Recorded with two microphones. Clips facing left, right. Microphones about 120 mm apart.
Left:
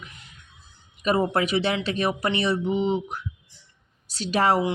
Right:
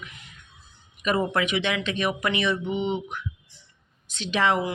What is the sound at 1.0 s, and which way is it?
Speech, 35° left (ahead or behind).